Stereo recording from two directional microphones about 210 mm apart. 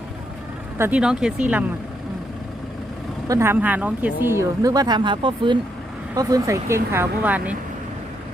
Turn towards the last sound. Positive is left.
turn(degrees=-10)  # may be behind; listen again after turning